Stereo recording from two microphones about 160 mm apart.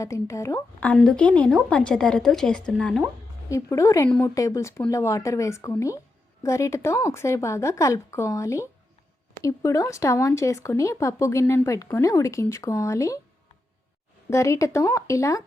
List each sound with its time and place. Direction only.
0.0 s speech: 20° left (ahead or behind)
0.9 s speech: 5° left (ahead or behind)
3.5 s a woman's voice: 20° left (ahead or behind)
14.3 s speech: 20° left (ahead or behind)